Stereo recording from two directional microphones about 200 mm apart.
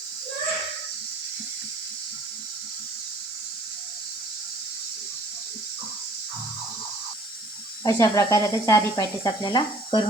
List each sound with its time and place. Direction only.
7.9 s speech: 15° left (ahead or behind)